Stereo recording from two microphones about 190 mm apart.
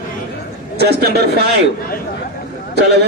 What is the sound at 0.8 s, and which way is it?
Speech, 60° right (ahead or behind).